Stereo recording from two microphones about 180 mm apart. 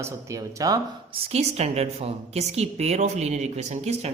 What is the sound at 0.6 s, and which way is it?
Speech, 20° right (ahead or behind).